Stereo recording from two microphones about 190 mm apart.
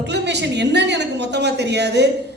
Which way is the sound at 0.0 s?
65° right (ahead or behind).